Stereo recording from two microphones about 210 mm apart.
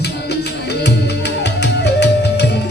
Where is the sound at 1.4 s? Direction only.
55° left (ahead or behind).